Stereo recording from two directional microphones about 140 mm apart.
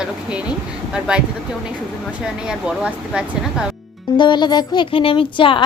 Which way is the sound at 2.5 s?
5° right (ahead or behind).